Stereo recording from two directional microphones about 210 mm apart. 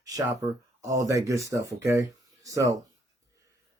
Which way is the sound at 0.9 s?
15° right (ahead or behind).